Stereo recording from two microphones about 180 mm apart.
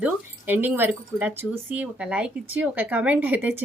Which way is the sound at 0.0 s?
10° right (ahead or behind).